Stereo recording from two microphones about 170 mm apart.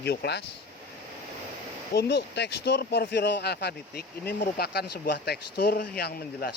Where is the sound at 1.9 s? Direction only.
85° left.